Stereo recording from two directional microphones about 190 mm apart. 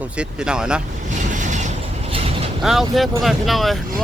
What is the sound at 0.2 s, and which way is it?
Speech, 5° right (ahead or behind).